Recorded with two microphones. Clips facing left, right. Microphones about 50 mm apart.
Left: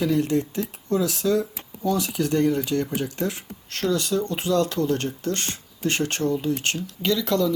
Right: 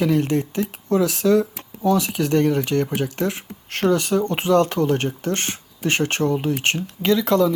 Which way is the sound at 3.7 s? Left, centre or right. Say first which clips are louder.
Right 5 dB; right.